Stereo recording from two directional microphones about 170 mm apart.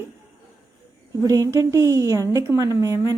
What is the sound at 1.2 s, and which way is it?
A woman's voice, 15° right (ahead or behind).